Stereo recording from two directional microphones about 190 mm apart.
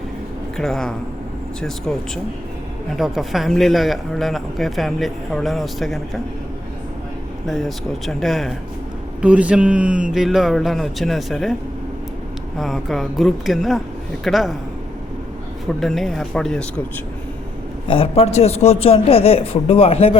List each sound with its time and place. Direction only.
0.5 s speech: centre (ahead or behind)
7.4 s speech: centre (ahead or behind)
12.5 s speech: centre (ahead or behind)
15.8 s speech: centre (ahead or behind)
17.8 s a man's voice: 30° left (ahead or behind)